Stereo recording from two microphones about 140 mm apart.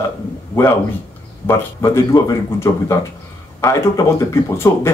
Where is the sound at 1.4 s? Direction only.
20° left (ahead or behind).